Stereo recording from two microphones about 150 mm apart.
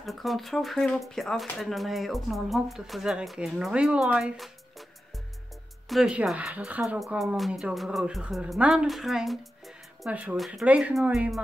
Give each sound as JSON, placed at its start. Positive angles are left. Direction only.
{"t": 0.0, "sound": "speech", "side_deg": 0}
{"t": 5.9, "sound": "speech", "side_deg": -5}